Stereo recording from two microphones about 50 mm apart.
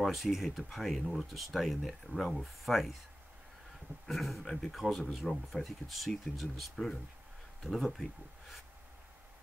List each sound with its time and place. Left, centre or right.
0.0 s speech: centre
4.1 s speech: centre